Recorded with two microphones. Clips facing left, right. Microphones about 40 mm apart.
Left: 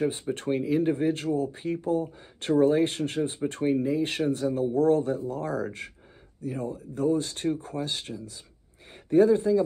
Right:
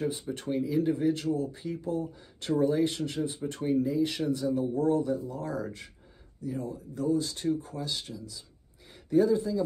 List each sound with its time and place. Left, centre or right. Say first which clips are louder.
0.0 s speech: left 4 dB; left